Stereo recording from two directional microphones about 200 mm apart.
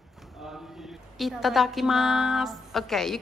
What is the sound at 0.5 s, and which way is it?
A woman's voice, centre (ahead or behind).